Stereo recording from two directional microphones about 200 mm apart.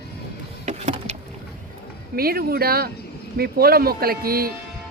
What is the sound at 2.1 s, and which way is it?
A man's voice, 50° right (ahead or behind).